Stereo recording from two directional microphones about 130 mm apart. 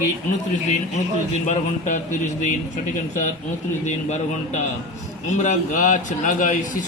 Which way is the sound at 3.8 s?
65° left (ahead or behind).